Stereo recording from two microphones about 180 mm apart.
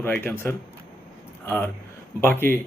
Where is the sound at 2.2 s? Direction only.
10° left (ahead or behind).